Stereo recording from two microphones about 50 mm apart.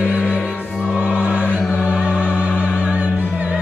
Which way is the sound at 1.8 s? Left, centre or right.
Right.